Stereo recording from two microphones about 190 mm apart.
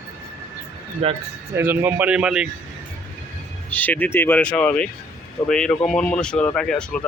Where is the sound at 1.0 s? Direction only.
30° right (ahead or behind).